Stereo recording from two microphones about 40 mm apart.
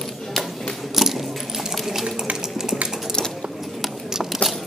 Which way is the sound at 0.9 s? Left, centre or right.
Centre.